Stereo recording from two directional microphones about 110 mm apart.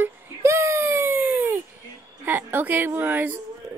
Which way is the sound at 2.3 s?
20° right (ahead or behind).